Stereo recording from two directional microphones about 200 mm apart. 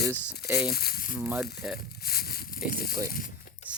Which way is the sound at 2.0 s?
50° left (ahead or behind).